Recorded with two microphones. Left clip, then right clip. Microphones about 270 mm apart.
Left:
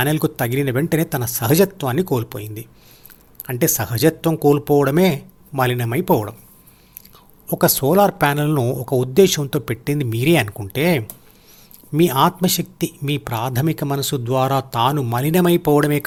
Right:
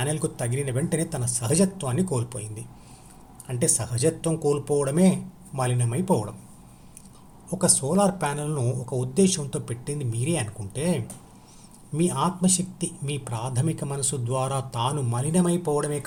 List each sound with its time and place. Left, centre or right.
0.0 s speech: left
7.4 s speech: left